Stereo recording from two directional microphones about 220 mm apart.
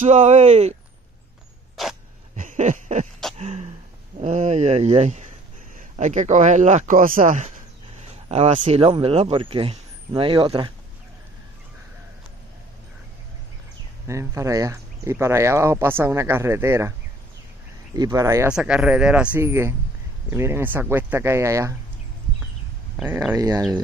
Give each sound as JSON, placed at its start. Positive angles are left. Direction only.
{"t": 0.0, "sound": "speech", "side_deg": -35}
{"t": 1.8, "sound": "dog", "side_deg": 0}
{"t": 2.3, "sound": "a sound", "side_deg": -35}
{"t": 4.2, "sound": "speech", "side_deg": -30}
{"t": 14.0, "sound": "speech", "side_deg": -15}
{"t": 17.9, "sound": "speech", "side_deg": -15}
{"t": 22.9, "sound": "speech", "side_deg": -5}